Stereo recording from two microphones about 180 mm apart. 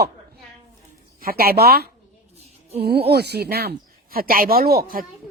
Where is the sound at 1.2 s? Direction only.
55° right (ahead or behind).